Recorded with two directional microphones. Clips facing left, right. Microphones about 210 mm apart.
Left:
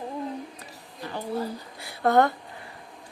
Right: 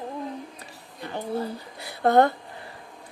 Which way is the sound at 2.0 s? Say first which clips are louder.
Right 2 dB; 30° right (ahead or behind).